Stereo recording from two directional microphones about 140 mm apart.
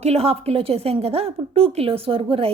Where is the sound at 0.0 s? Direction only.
45° right (ahead or behind).